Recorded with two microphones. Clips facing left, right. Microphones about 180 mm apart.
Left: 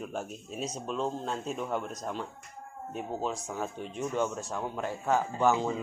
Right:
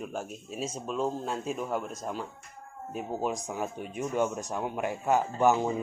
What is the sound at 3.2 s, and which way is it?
A man's voice, 15° right (ahead or behind).